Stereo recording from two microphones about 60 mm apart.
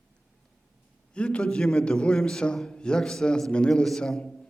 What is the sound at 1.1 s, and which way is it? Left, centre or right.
A man's voice, centre.